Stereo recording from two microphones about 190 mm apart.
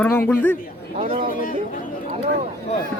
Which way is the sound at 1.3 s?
45° left (ahead or behind).